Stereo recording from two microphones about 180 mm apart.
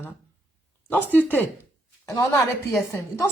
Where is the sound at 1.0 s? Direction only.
10° left (ahead or behind).